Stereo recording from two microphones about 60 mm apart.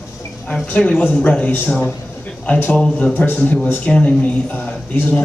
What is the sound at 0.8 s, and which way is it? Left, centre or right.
A man's voice, left.